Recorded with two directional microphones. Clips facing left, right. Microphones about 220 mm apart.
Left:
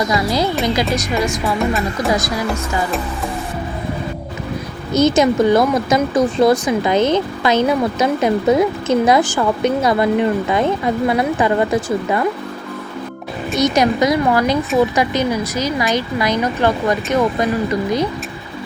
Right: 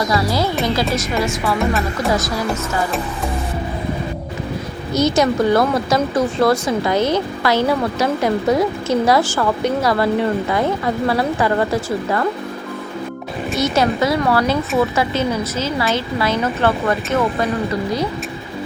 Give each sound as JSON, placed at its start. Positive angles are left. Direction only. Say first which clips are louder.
{"t": 0.1, "sound": "speech", "louder": "left 1 dB", "side_deg": 15}
{"t": 4.9, "sound": "speech", "louder": "left 3 dB", "side_deg": 20}
{"t": 13.6, "sound": "speech", "louder": "left 3 dB", "side_deg": 15}